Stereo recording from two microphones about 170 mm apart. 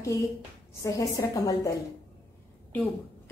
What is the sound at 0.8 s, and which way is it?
A woman's voice, 20° left (ahead or behind).